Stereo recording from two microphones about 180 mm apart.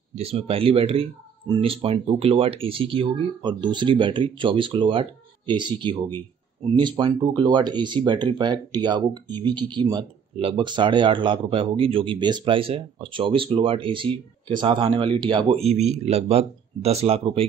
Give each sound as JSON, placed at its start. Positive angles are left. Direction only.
{"t": 0.1, "sound": "speech", "side_deg": -35}
{"t": 6.6, "sound": "speech", "side_deg": -25}